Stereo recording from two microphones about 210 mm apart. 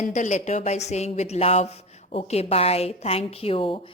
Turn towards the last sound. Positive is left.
turn(degrees=25)  # may be behind; listen again after turning